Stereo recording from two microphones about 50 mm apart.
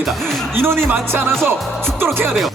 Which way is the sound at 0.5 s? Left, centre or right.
Right.